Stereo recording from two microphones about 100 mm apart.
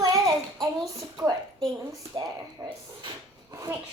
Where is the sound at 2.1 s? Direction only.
50° right (ahead or behind).